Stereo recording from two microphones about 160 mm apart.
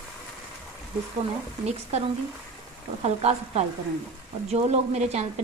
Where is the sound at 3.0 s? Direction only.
40° right (ahead or behind).